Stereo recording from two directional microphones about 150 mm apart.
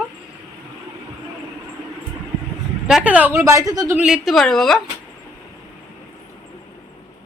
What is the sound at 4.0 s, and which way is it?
Speech, centre (ahead or behind).